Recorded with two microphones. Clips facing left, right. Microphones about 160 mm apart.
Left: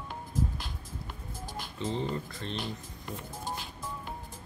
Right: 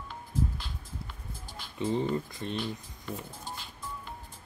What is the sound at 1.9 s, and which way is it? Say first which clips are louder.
Speech: right 5 dB; 15° right (ahead or behind).